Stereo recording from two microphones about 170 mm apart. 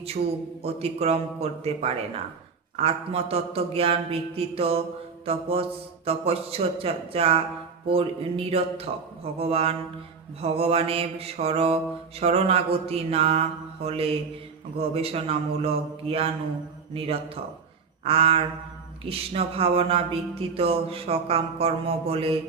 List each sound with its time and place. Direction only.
0.6 s speech: 35° right (ahead or behind)